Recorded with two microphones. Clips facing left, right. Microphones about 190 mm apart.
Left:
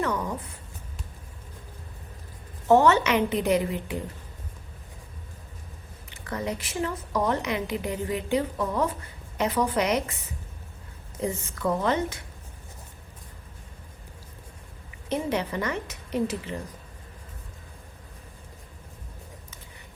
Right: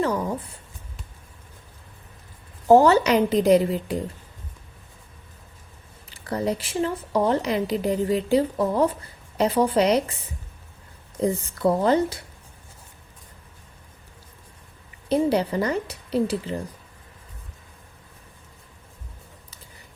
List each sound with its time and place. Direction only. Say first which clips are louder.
0.0 s writing: right 4 dB; 30° right (ahead or behind)
2.6 s speech: right 4 dB; 35° right (ahead or behind)
6.1 s speech: right 6 dB; 35° right (ahead or behind)
11.2 s speech: right 6 dB; 35° right (ahead or behind)
15.1 s speech: right 6 dB; 35° right (ahead or behind)